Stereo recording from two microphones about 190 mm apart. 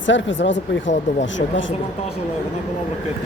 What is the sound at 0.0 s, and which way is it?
Speech, 75° left (ahead or behind).